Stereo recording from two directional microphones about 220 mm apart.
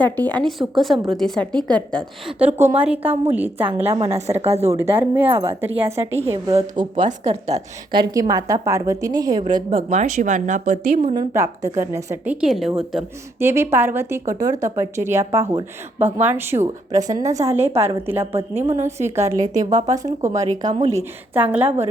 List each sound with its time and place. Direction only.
0.0 s a woman's voice: 5° left (ahead or behind)
2.4 s a woman's voice: 10° right (ahead or behind)
3.9 s a woman's voice: 25° right (ahead or behind)
4.7 s a woman's voice: 10° right (ahead or behind)
5.7 s a woman's voice: 25° right (ahead or behind)
6.2 s a woman's voice: 15° right (ahead or behind)
6.7 s a woman's voice: 35° right (ahead or behind)
8.1 s a woman's voice: 15° right (ahead or behind)
9.6 s speech: 35° right (ahead or behind)
11.0 s a woman's voice: 20° right (ahead or behind)
21.3 s a woman's voice: 10° right (ahead or behind)